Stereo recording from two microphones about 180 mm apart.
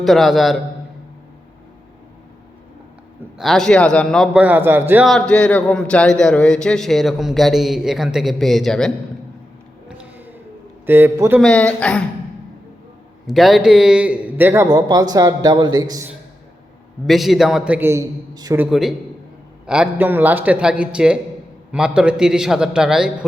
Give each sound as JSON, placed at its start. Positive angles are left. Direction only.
{"t": 0.0, "sound": "a man's voice", "side_deg": 0}
{"t": 3.3, "sound": "a man's voice", "side_deg": 0}
{"t": 4.4, "sound": "a man's voice", "side_deg": -10}
{"t": 5.0, "sound": "a man's voice", "side_deg": 5}
{"t": 10.0, "sound": "a sound", "side_deg": -10}
{"t": 10.8, "sound": "a man's voice", "side_deg": -10}
{"t": 11.3, "sound": "a man's voice", "side_deg": 5}
{"t": 13.2, "sound": "a man's voice", "side_deg": 0}
{"t": 17.1, "sound": "a man's voice", "side_deg": 0}
{"t": 18.6, "sound": "a man's voice", "side_deg": 0}